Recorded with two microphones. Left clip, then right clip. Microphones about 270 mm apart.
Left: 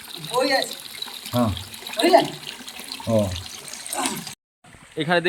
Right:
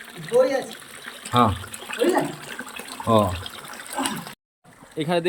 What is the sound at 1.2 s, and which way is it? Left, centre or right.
Water, centre.